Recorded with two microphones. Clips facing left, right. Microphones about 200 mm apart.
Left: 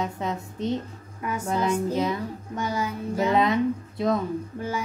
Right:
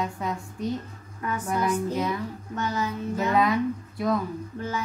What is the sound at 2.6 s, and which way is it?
Speech, 10° left (ahead or behind).